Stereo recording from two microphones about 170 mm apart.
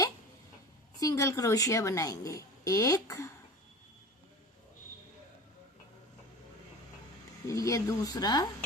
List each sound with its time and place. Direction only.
0.9 s a woman's voice: 20° left (ahead or behind)
7.4 s a woman's voice: 15° left (ahead or behind)